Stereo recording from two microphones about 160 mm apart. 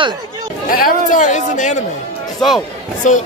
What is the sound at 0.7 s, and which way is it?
Speech, 55° left (ahead or behind).